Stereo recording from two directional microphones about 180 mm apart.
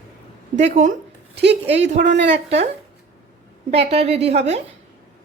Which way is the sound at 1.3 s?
70° right (ahead or behind).